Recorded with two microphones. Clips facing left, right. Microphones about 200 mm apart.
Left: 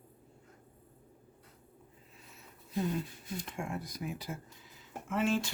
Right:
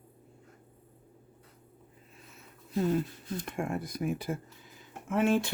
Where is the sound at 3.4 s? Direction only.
55° right (ahead or behind).